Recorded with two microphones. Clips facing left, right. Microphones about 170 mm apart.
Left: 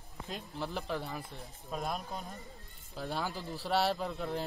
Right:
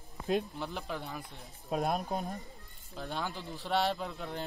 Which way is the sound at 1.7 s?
50° right (ahead or behind).